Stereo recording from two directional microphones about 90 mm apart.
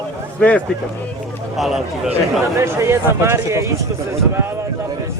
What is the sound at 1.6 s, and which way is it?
Speech, 5° right (ahead or behind).